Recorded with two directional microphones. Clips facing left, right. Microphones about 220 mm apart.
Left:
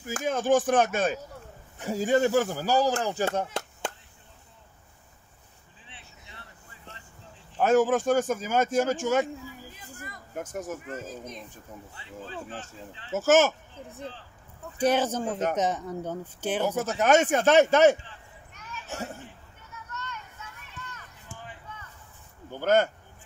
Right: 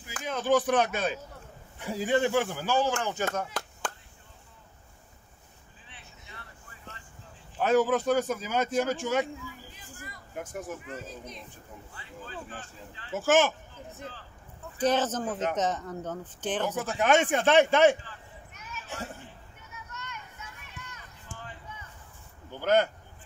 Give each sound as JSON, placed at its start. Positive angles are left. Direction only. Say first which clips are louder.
{"t": 0.0, "sound": "a man's voice", "louder": "left 5 dB", "side_deg": 45}
{"t": 7.5, "sound": "a man's voice", "louder": "left 2 dB", "side_deg": 45}
{"t": 11.9, "sound": "speech", "louder": "left 3 dB", "side_deg": 25}
{"t": 13.1, "sound": "a man's voice", "louder": "left 3 dB", "side_deg": 45}
{"t": 14.8, "sound": "speech", "louder": "left 2 dB", "side_deg": 10}
{"t": 16.7, "sound": "a man's voice", "louder": "left 3 dB", "side_deg": 45}
{"t": 22.6, "sound": "a man's voice", "louder": "left 2 dB", "side_deg": 45}